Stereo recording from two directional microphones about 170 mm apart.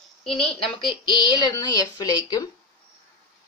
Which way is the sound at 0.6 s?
25° left (ahead or behind).